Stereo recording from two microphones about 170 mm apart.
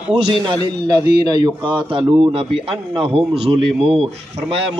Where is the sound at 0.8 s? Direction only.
25° right (ahead or behind).